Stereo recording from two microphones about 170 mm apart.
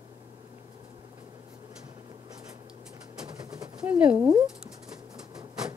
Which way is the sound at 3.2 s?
25° right (ahead or behind).